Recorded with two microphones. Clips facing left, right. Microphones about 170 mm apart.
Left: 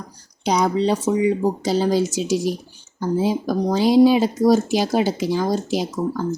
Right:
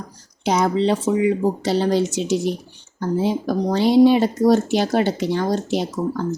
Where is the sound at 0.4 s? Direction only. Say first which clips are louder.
Right 1 dB; 5° right (ahead or behind).